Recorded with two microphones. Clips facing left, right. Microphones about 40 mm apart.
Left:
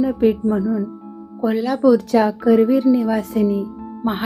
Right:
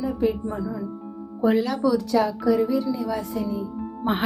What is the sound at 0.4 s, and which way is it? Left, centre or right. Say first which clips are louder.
Speech: left 10 dB; left.